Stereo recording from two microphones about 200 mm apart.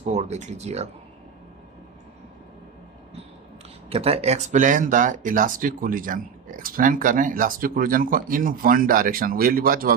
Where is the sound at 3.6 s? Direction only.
30° right (ahead or behind).